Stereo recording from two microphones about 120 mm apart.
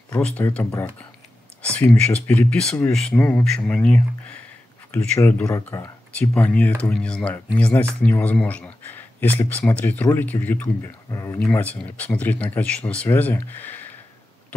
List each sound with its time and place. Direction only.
0.1 s speech: 10° left (ahead or behind)
11.5 s speech: 15° left (ahead or behind)